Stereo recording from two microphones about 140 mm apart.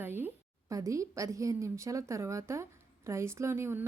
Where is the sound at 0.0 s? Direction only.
15° right (ahead or behind).